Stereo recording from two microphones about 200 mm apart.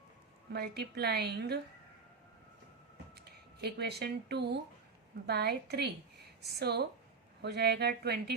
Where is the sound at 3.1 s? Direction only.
55° right (ahead or behind).